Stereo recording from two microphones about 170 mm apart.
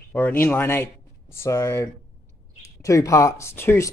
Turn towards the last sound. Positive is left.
turn(degrees=15)  # may be behind; listen again after turning